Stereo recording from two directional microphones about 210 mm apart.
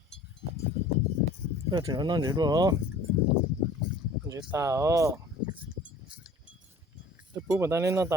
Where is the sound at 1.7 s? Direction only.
20° right (ahead or behind).